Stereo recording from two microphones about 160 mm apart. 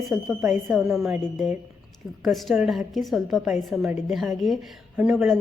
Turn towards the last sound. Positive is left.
turn(degrees=-5)  # may be behind; listen again after turning